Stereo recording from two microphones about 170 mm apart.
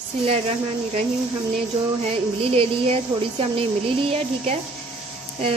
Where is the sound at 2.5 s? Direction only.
35° right (ahead or behind).